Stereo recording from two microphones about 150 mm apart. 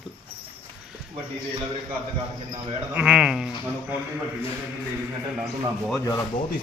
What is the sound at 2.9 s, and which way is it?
Speech, 10° right (ahead or behind).